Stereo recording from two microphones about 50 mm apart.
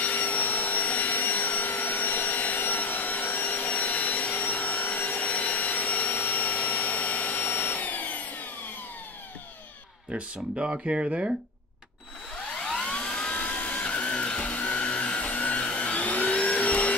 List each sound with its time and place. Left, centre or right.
0.0 s vacuum cleaner: left
7.4 s vacuum cleaner: left
10.1 s speech: right
12.5 s a sound: centre